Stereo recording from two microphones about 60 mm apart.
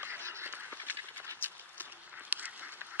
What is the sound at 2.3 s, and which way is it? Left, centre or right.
Duck, right.